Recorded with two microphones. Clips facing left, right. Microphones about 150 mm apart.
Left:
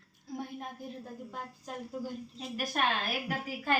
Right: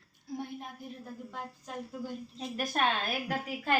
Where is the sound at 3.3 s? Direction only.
20° right (ahead or behind).